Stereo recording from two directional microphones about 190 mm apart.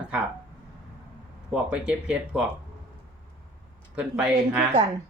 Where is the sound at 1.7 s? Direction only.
5° right (ahead or behind).